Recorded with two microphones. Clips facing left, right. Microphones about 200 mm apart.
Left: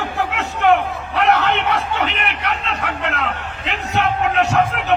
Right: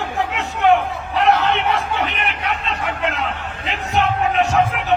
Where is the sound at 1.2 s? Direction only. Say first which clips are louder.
Even; 75° left (ahead or behind).